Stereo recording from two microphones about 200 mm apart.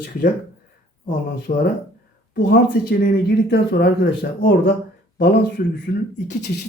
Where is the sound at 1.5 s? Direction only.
50° left (ahead or behind).